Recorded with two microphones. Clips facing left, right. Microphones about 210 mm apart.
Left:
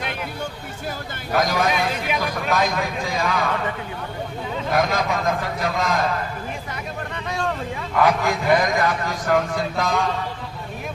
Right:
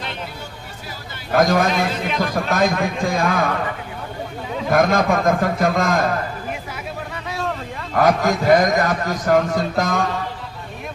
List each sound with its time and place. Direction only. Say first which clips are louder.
1.3 s a man's voice: right 4 dB; 50° right (ahead or behind)
4.7 s a man's voice: right 5 dB; 50° right (ahead or behind)
6.5 s vehicle: right 2 dB; 5° right (ahead or behind)
7.9 s a man's voice: right 3 dB; 45° right (ahead or behind)